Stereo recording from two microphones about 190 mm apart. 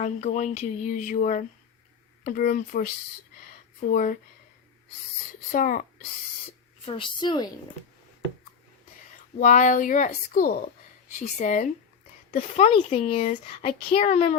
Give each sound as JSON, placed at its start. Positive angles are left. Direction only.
{"t": 0.0, "sound": "a child's voice", "side_deg": 35}
{"t": 5.5, "sound": "speech", "side_deg": 45}
{"t": 6.8, "sound": "a woman's voice", "side_deg": 25}
{"t": 9.4, "sound": "a child's voice", "side_deg": 40}